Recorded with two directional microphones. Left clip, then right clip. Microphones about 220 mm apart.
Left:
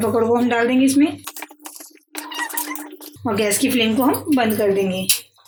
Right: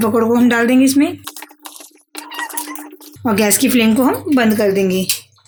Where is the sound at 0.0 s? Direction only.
45° right (ahead or behind).